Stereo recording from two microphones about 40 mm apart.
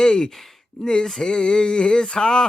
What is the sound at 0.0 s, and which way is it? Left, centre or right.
Speech, centre.